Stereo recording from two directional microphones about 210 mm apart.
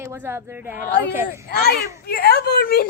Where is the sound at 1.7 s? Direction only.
45° left (ahead or behind).